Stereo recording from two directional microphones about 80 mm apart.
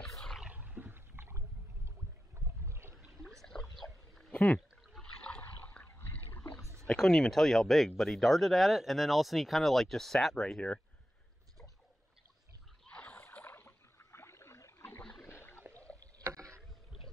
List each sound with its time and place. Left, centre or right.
0.0 s a sound: centre
0.4 s wild animals: centre
2.3 s boat: right
3.7 s a sound: centre
4.3 s a sound: centre
5.0 s toilet flush: centre
5.4 s water: left
6.8 s speech: centre
12.8 s rowboat: centre
13.3 s a sound: left
15.9 s rowboat: centre
16.3 s rowboat: right